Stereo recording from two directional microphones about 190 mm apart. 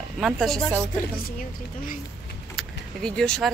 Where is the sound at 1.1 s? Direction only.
45° left (ahead or behind).